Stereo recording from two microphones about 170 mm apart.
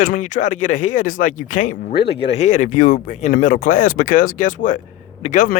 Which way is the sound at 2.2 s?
40° left (ahead or behind).